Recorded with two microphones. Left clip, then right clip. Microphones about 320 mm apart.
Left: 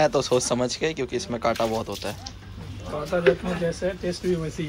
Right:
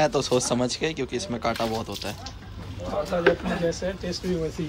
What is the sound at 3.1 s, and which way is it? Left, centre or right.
Speech, left.